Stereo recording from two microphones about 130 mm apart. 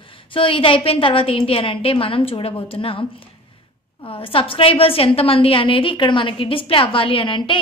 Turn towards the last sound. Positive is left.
turn(degrees=40)  # may be behind; listen again after turning